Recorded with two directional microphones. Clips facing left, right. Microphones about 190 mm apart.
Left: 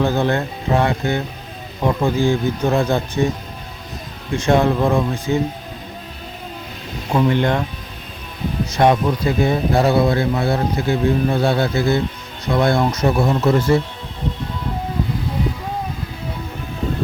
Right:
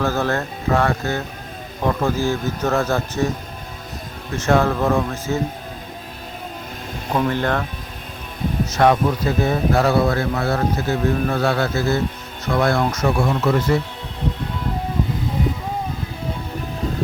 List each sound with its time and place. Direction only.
0.0 s a man's voice: 15° left (ahead or behind)
4.4 s a man's voice: 15° left (ahead or behind)
7.1 s a man's voice: 10° left (ahead or behind)
8.7 s a man's voice: 15° left (ahead or behind)